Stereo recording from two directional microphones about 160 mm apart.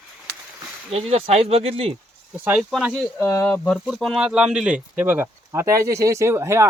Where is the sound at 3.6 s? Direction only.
Centre (ahead or behind); by 6.7 s 15° right (ahead or behind).